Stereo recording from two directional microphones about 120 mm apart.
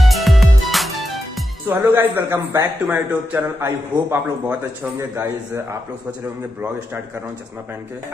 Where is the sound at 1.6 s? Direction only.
15° right (ahead or behind).